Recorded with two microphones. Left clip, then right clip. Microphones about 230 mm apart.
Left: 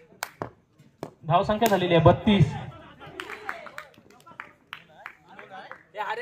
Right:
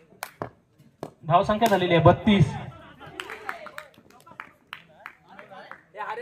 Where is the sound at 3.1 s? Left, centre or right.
Right.